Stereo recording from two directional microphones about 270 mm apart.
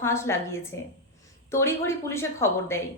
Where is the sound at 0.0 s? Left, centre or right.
Centre.